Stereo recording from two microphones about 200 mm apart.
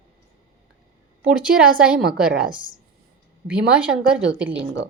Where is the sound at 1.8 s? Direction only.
5° right (ahead or behind).